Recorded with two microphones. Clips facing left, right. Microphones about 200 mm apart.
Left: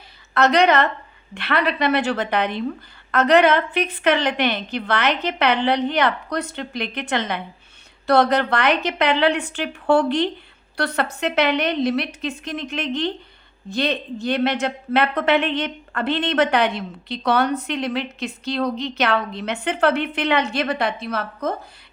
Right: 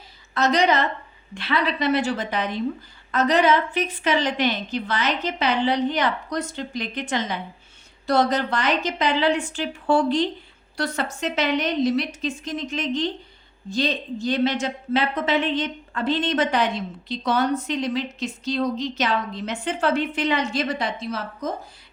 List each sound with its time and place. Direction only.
0.3 s a woman's voice: 60° left (ahead or behind)